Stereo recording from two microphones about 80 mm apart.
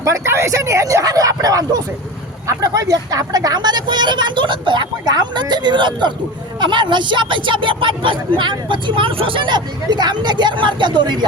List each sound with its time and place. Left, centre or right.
0.0 s speech: right